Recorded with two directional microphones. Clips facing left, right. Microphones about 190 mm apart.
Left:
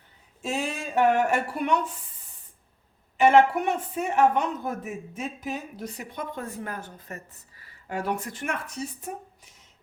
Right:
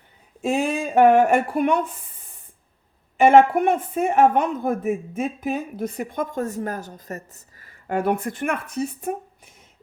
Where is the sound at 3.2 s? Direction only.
50° right (ahead or behind).